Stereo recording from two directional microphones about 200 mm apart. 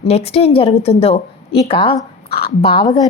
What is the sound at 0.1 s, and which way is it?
A woman's voice, 30° left (ahead or behind).